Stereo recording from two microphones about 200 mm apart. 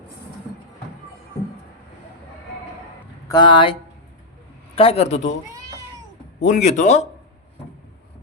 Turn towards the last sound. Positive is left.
turn(degrees=35)  # may be behind; listen again after turning